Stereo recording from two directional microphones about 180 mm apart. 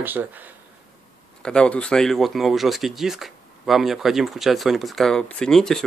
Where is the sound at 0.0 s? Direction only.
10° right (ahead or behind).